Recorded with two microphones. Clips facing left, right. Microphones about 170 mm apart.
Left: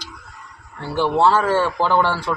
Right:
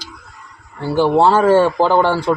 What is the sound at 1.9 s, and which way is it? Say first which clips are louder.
Speech: right 4 dB; 45° right (ahead or behind).